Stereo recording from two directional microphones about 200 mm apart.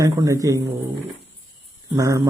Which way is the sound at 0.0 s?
15° right (ahead or behind).